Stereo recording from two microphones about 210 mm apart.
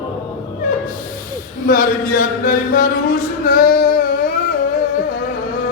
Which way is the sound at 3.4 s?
40° left (ahead or behind).